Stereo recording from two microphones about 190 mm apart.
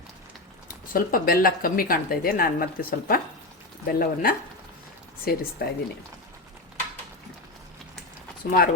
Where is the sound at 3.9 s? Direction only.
50° left (ahead or behind).